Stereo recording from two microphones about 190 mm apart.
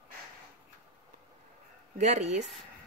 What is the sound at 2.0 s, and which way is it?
Speech, 35° right (ahead or behind).